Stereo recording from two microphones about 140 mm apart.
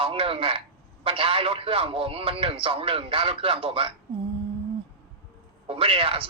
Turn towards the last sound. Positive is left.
turn(degrees=-40)  # may be behind; listen again after turning